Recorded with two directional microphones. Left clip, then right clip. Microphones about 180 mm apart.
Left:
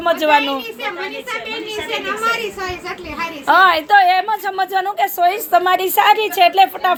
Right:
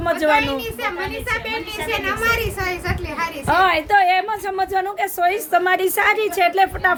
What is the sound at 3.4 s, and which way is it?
Speech, centre (ahead or behind).